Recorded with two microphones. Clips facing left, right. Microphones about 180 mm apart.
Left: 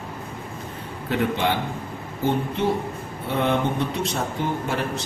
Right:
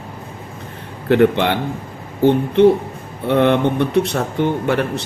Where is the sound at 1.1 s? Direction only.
65° right (ahead or behind).